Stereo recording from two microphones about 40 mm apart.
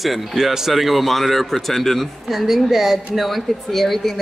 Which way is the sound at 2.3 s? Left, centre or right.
Centre.